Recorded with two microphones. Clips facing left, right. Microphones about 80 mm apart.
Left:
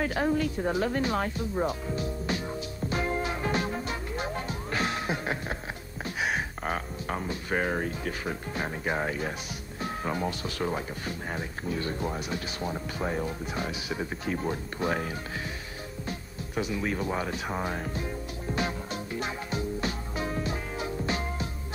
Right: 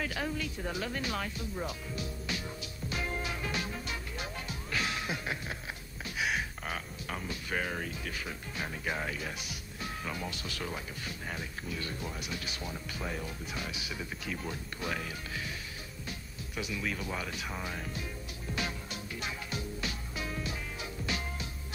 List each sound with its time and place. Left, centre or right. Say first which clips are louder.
0.0 s music: left 9 dB; left
6.0 s speech: left 4 dB; left
16.1 s music: left 7 dB; left